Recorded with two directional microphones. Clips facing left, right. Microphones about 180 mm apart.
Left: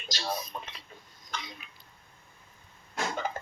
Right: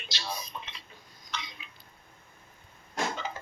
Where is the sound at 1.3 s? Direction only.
50° left (ahead or behind).